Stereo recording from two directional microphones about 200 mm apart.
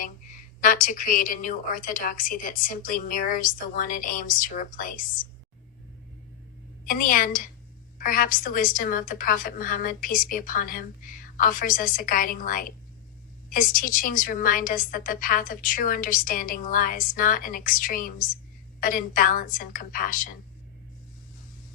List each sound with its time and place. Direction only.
0.6 s a woman's voice: 40° left (ahead or behind)
6.8 s a woman's voice: 45° left (ahead or behind)